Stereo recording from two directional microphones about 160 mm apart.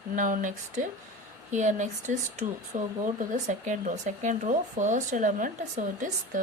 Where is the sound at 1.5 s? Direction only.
50° right (ahead or behind).